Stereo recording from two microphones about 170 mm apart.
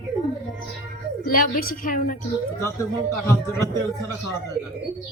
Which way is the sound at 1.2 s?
55° left (ahead or behind).